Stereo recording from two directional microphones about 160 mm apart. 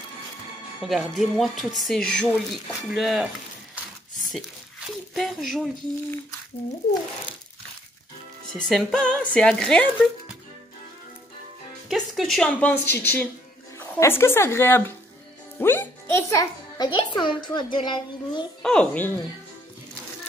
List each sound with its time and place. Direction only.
0.8 s speech: centre (ahead or behind)
4.3 s speech: centre (ahead or behind)
8.5 s a woman's voice: 5° left (ahead or behind)
11.9 s a woman's voice: centre (ahead or behind); by 18.5 s 30° left (ahead or behind)
18.6 s a woman's voice: 5° left (ahead or behind)